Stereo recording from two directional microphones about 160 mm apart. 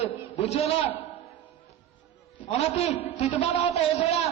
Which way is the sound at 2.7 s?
40° left (ahead or behind).